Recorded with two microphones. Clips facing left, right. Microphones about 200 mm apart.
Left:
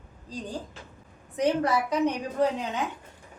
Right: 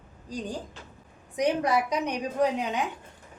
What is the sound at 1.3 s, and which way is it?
A woman's voice, 15° right (ahead or behind).